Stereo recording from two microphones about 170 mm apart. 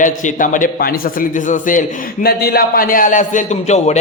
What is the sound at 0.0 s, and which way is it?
A man's voice, 50° left (ahead or behind).